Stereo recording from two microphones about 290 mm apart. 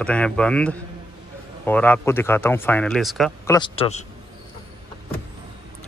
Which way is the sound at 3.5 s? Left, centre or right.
Centre.